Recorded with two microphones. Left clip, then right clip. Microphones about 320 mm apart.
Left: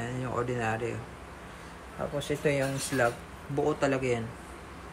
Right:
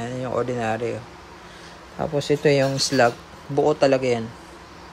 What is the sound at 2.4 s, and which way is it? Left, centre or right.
Speech, right.